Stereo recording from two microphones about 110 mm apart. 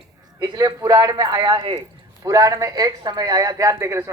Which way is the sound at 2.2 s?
30° right (ahead or behind).